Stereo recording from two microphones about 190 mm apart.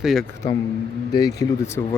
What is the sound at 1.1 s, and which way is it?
Speech, 20° left (ahead or behind).